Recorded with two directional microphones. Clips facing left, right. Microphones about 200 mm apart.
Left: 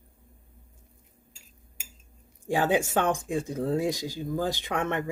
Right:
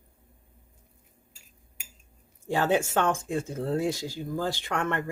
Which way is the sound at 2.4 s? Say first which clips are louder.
Even; 15° left (ahead or behind).